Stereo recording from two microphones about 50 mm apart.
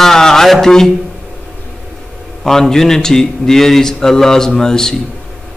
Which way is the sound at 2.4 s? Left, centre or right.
Centre.